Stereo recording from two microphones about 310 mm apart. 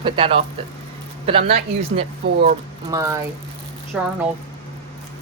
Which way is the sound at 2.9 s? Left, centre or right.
Centre.